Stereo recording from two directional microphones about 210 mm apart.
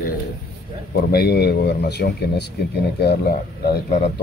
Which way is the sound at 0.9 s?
50° left (ahead or behind).